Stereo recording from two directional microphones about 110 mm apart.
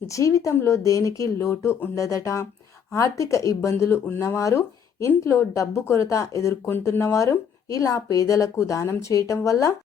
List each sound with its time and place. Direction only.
0.1 s speech: 30° left (ahead or behind)